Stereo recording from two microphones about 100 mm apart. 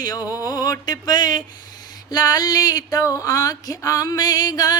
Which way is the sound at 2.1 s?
40° left (ahead or behind).